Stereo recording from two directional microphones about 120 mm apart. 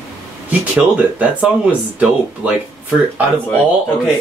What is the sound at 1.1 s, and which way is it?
Speech, 15° right (ahead or behind).